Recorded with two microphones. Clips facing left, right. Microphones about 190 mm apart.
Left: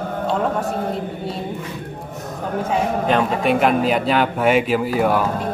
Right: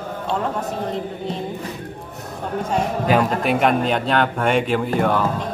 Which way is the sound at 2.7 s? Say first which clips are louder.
Even; centre (ahead or behind).